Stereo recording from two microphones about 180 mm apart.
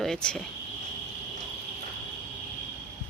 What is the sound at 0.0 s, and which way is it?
Speech, 5° left (ahead or behind).